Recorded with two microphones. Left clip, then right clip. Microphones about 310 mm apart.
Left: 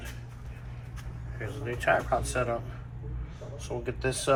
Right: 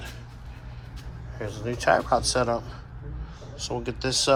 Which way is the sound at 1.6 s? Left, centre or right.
Centre.